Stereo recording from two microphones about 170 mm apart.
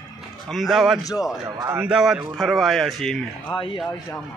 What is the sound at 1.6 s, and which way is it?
Speech, 15° right (ahead or behind).